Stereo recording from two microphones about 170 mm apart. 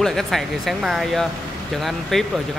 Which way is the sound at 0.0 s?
Centre (ahead or behind).